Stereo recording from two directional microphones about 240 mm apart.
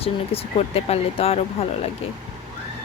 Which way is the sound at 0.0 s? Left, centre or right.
Left.